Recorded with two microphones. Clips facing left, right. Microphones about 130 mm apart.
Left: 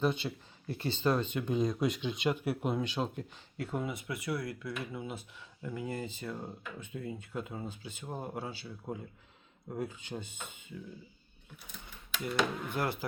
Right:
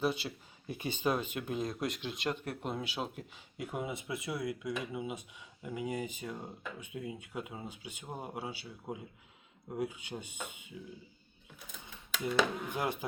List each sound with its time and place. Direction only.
0.0 s speech: 5° right (ahead or behind)
3.6 s speech: 15° right (ahead or behind)
12.2 s speech: 15° right (ahead or behind)